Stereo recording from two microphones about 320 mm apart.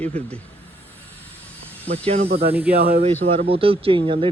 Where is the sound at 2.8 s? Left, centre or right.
Right.